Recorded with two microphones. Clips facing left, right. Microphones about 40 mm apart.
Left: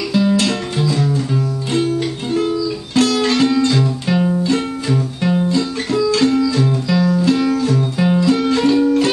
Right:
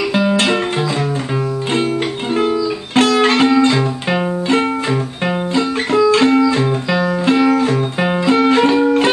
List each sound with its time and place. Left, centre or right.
0.1 s music: right
2.3 s music: right